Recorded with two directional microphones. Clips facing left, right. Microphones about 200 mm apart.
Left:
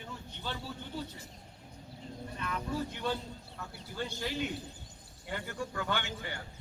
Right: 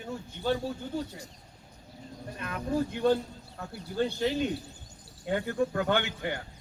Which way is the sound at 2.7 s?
50° right (ahead or behind).